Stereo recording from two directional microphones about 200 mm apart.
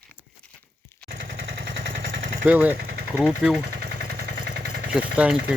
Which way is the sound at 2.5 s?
10° right (ahead or behind).